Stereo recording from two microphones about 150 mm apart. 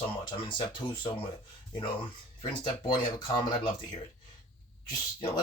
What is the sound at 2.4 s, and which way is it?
Speech, 30° left (ahead or behind).